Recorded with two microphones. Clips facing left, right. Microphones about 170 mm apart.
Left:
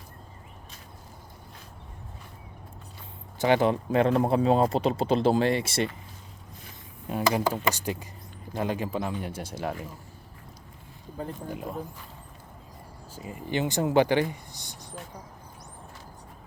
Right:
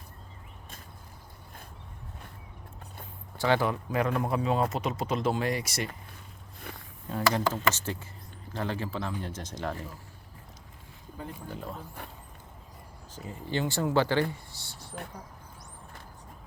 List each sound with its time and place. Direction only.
3.3 s speech: 20° left (ahead or behind)
7.1 s speech: 15° left (ahead or behind)
11.4 s speech: 15° left (ahead or behind)
13.1 s speech: 15° left (ahead or behind)